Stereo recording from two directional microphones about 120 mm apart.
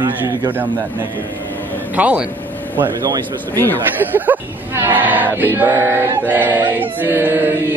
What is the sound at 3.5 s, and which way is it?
Speech, 20° left (ahead or behind).